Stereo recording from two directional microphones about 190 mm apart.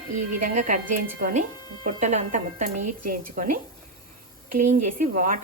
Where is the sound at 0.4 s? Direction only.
45° right (ahead or behind).